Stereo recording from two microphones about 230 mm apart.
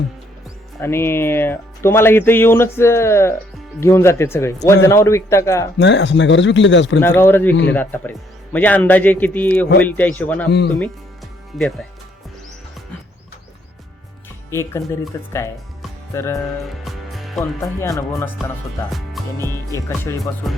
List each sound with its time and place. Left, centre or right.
0.8 s speech: centre
5.8 s speech: left
7.0 s speech: centre
14.5 s speech: centre
16.8 s music: centre
17.4 s speech: centre
18.4 s speech: centre
18.9 s music: centre
19.5 s speech: centre